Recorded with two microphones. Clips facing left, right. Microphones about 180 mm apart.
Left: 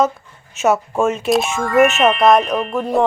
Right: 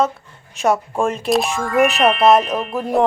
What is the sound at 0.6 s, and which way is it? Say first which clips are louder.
A woman's voice: left 2 dB; 5° left (ahead or behind).